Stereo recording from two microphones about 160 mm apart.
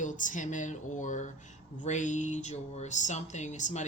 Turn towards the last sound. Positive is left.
turn(degrees=50)  # may be behind; listen again after turning